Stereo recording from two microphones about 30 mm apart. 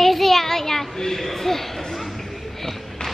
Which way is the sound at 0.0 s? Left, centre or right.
Centre.